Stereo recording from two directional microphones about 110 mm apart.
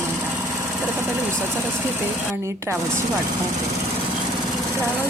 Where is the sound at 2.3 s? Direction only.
25° right (ahead or behind).